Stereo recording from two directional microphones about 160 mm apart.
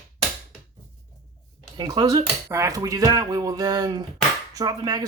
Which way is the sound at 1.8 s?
25° right (ahead or behind).